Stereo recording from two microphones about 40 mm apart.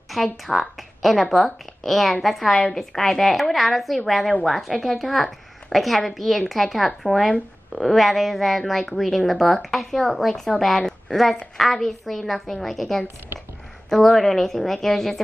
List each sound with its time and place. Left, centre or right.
0.1 s a woman's voice: centre
7.2 s speech: centre
7.8 s speech: centre
10.8 s a sound: centre
11.5 s a woman's voice: centre